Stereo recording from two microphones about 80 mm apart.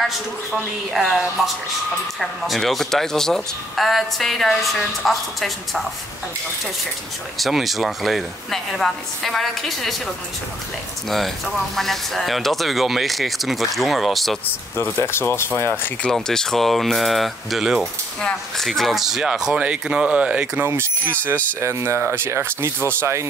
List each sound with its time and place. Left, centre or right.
0.9 s speech: centre
7.3 s speech: centre
11.1 s speech: centre
14.8 s speech: left
16.0 s speech: centre
20.6 s speech: right